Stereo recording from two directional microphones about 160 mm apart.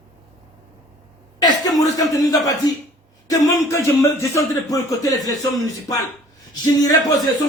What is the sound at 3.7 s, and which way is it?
Speech, 20° left (ahead or behind).